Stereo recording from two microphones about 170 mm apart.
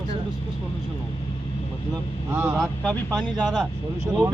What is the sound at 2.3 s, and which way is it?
Speech, 15° right (ahead or behind).